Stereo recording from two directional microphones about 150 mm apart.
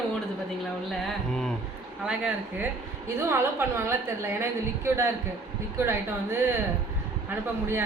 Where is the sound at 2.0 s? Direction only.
5° right (ahead or behind).